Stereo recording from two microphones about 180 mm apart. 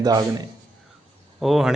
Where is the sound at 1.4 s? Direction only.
Centre (ahead or behind).